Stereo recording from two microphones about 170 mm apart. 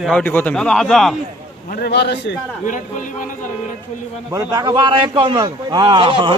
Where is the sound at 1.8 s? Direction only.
80° left.